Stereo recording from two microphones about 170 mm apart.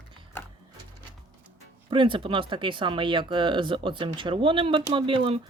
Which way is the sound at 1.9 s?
30° right (ahead or behind).